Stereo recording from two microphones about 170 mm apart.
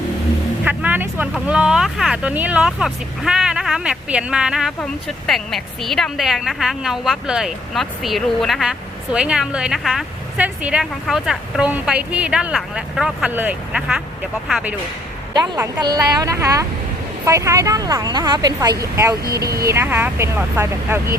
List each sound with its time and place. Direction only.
0.6 s speech: 10° right (ahead or behind)
15.3 s speech: 25° right (ahead or behind)